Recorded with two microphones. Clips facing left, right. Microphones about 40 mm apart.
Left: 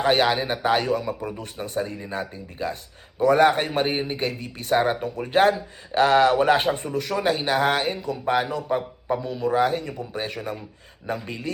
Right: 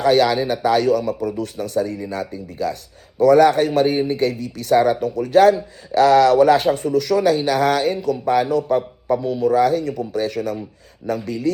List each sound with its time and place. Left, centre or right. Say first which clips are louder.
0.0 s a man's voice: right 5 dB; left
9.4 s a man's voice: right 5 dB; left